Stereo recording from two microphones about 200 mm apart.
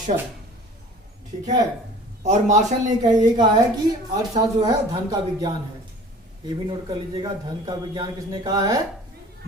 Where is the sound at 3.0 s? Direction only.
20° right (ahead or behind).